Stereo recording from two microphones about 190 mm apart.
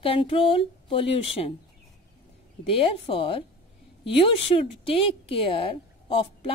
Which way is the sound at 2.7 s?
30° left (ahead or behind).